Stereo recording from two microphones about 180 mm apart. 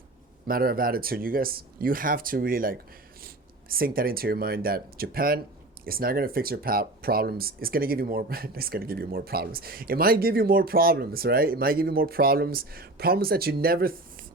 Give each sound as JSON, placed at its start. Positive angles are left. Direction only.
{"t": 0.4, "sound": "speech", "side_deg": -55}